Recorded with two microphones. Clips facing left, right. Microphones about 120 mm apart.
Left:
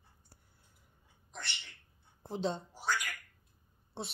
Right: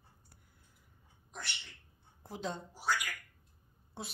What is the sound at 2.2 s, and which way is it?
Speech, 25° left (ahead or behind).